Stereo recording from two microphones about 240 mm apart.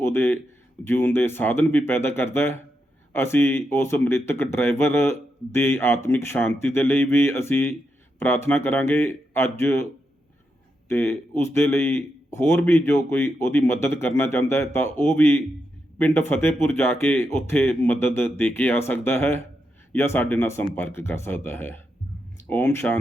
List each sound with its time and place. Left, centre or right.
0.0 s a man's voice: centre
10.8 s speech: centre